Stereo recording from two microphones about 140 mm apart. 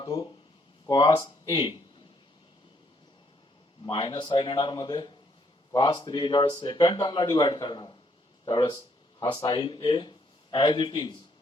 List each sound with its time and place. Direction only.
0.0 s speech: 30° left (ahead or behind)
3.8 s speech: 40° left (ahead or behind)